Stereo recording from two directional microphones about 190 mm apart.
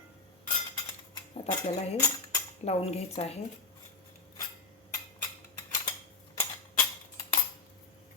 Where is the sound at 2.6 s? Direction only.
35° left (ahead or behind).